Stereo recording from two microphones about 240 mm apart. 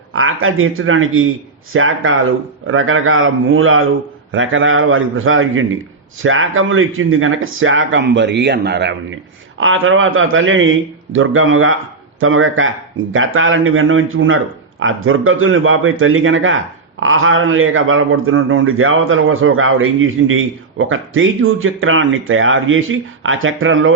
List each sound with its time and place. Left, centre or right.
0.1 s a man's voice: right